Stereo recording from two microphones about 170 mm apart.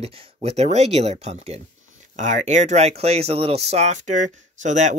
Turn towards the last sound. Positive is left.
turn(degrees=-45)  # may be behind; listen again after turning